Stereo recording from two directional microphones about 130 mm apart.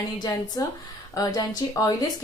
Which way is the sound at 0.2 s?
30° left (ahead or behind).